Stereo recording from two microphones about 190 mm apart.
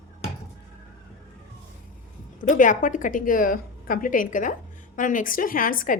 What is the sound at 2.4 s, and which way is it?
A woman's voice, 45° left (ahead or behind).